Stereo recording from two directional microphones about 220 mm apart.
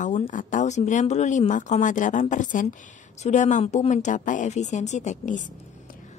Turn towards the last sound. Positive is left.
turn(degrees=35)  # may be behind; listen again after turning